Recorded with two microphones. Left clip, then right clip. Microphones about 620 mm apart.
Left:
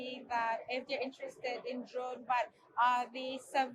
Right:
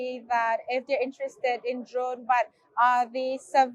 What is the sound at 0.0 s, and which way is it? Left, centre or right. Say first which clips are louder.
A woman's voice: right 10 dB; right.